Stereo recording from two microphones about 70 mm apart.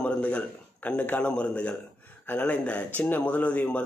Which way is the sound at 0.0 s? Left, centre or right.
Centre.